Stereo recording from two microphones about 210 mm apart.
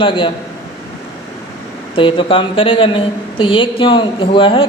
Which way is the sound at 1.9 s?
25° left (ahead or behind).